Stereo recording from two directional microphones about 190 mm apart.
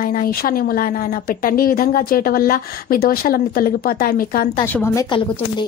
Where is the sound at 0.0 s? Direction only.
50° left (ahead or behind).